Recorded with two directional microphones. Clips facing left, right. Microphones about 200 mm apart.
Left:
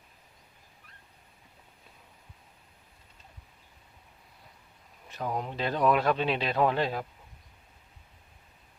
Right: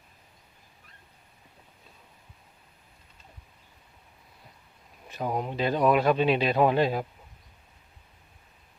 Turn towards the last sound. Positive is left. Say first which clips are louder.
# right 4 dB
turn(degrees=-10)  # may be behind; listen again after turning